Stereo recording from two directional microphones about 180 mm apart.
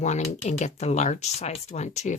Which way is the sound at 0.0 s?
40° left (ahead or behind).